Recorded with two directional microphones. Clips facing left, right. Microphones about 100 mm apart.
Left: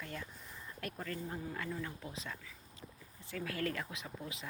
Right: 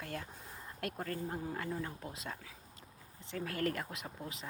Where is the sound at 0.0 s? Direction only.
60° right (ahead or behind).